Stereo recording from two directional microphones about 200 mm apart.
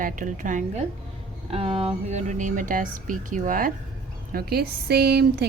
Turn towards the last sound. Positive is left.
turn(degrees=-55)  # may be behind; listen again after turning